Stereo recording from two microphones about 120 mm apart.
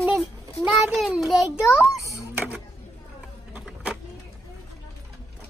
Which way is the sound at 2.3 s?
10° right (ahead or behind).